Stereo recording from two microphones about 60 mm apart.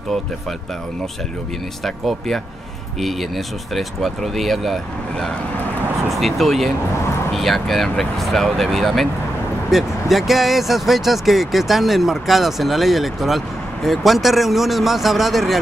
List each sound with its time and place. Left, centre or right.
1.9 s speech: centre
6.0 s speech: centre